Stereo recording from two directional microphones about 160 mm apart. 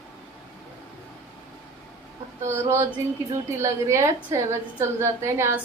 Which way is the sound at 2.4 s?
15° right (ahead or behind).